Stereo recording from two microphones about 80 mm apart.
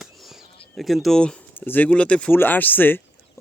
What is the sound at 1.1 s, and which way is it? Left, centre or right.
Speech, centre.